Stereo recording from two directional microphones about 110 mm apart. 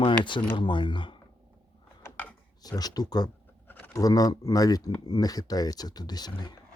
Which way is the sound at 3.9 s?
35° left (ahead or behind).